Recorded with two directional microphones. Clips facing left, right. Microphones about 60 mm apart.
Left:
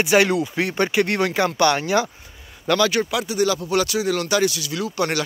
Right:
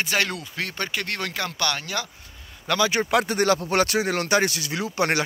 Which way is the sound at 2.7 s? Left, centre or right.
Centre.